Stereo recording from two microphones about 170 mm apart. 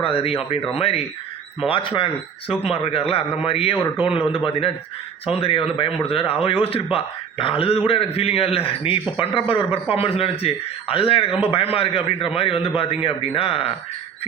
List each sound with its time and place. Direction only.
0.0 s a man's voice: 35° left (ahead or behind)